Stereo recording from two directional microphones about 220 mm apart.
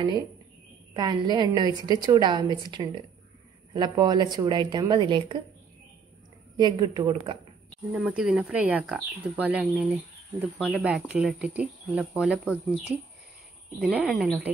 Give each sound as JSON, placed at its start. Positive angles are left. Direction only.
{"t": 0.9, "sound": "a woman's voice", "side_deg": -20}
{"t": 6.5, "sound": "a woman's voice", "side_deg": -20}
{"t": 7.9, "sound": "speech", "side_deg": -5}